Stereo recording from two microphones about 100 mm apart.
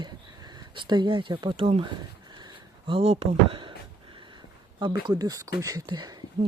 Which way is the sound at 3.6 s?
55° right (ahead or behind).